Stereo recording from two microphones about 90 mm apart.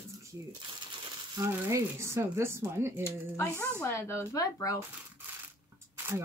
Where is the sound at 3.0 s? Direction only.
30° left (ahead or behind).